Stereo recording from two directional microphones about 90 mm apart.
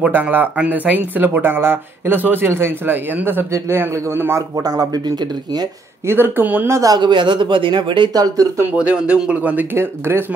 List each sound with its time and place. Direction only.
0.0 s a man's voice: 20° right (ahead or behind); by 5.7 s 50° right (ahead or behind)
6.0 s speech: 25° right (ahead or behind)
6.7 s a man's voice: 40° right (ahead or behind)
7.0 s speech: 60° right (ahead or behind)
8.1 s speech: 45° right (ahead or behind)
8.7 s speech: 15° right (ahead or behind)
9.8 s speech: 25° right (ahead or behind)